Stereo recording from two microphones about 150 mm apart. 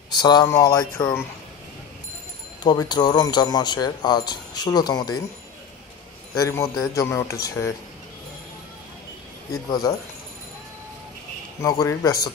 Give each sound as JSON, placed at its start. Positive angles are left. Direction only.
{"t": 0.1, "sound": "speech", "side_deg": 30}
{"t": 2.6, "sound": "speech", "side_deg": 30}
{"t": 6.3, "sound": "speech", "side_deg": 20}
{"t": 9.5, "sound": "speech", "side_deg": 20}
{"t": 11.6, "sound": "speech", "side_deg": 25}